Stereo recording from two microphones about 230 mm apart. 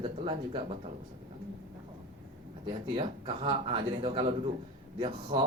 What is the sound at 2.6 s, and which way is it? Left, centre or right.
A man's voice, right.